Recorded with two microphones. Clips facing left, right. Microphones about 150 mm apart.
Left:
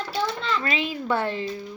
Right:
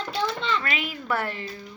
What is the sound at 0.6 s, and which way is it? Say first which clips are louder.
Speech: left 4 dB; 25° left (ahead or behind).